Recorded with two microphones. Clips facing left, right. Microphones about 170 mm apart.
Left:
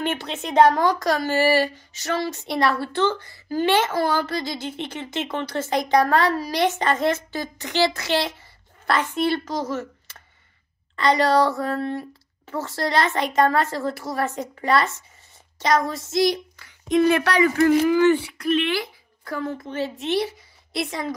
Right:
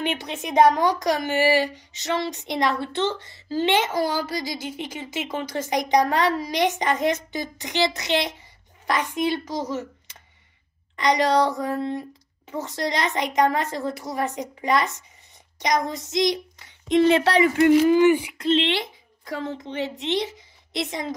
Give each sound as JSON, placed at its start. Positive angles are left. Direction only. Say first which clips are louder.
{"t": 0.0, "sound": "a woman's voice", "louder": "left 1 dB", "side_deg": -15}
{"t": 18.4, "sound": "a woman's voice", "louder": "even", "side_deg": -25}